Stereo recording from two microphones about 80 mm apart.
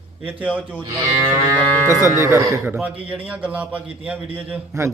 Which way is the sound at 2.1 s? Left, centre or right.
Right.